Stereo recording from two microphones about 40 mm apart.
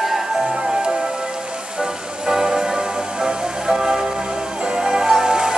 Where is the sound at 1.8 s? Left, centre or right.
Centre.